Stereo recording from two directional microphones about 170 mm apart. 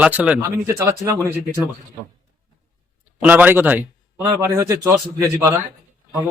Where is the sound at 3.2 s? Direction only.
10° right (ahead or behind).